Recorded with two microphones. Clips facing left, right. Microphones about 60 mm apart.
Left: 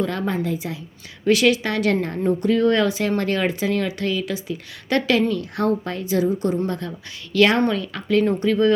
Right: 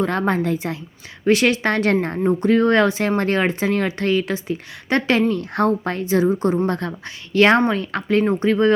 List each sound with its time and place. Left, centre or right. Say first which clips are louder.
0.0 s a woman's voice: right 4 dB; right
1.2 s a woman's voice: right 1 dB; right
7.3 s a woman's voice: right 2 dB; right
8.2 s speech: right 1 dB; right
8.4 s a woman's voice: right 2 dB; right